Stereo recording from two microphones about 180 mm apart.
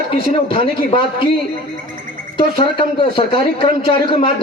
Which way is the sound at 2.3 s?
30° left (ahead or behind).